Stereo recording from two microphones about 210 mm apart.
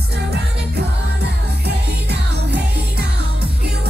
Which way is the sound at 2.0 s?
50° right (ahead or behind).